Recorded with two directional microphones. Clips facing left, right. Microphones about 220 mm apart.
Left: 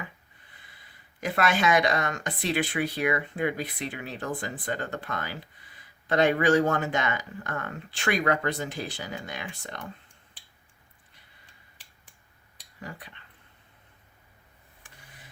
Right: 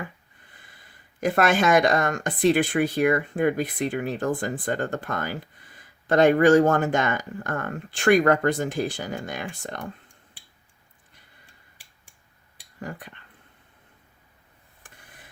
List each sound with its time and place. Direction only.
1.2 s speech: 50° right (ahead or behind)
12.8 s speech: 50° right (ahead or behind)